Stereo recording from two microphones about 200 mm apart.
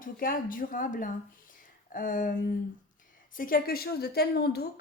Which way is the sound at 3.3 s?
45° left (ahead or behind).